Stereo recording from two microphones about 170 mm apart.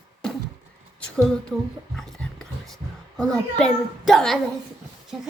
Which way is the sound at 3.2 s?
5° left (ahead or behind).